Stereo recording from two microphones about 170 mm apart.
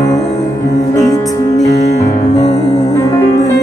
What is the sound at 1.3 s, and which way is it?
Music, 20° left (ahead or behind).